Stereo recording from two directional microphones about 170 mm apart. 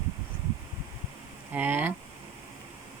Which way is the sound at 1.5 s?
10° right (ahead or behind).